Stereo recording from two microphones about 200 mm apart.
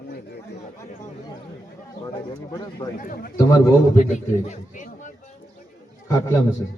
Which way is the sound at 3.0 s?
45° left (ahead or behind).